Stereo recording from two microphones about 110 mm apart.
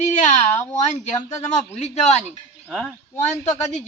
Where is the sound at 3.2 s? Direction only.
90° left.